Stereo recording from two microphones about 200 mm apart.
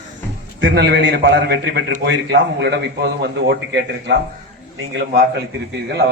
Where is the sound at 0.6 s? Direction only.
55° right (ahead or behind).